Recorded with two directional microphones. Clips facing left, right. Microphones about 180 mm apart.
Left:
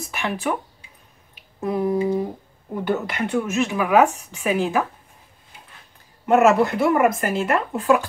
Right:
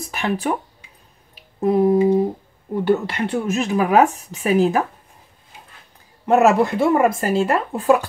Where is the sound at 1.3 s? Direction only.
35° right (ahead or behind).